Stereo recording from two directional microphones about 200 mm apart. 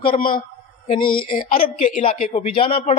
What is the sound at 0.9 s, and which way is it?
Speech, 25° left (ahead or behind).